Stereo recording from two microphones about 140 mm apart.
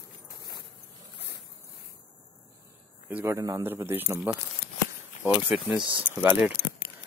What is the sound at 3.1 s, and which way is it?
Speech, 20° right (ahead or behind).